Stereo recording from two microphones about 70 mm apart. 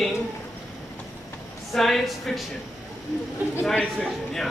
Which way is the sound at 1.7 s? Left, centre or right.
Centre.